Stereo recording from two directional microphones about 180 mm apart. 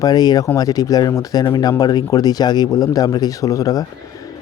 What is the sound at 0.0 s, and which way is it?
Speech, 20° left (ahead or behind).